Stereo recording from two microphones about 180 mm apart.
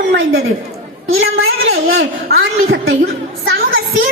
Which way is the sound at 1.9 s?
75° right (ahead or behind).